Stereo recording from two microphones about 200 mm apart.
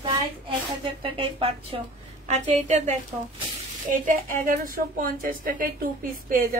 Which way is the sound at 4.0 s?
40° right (ahead or behind).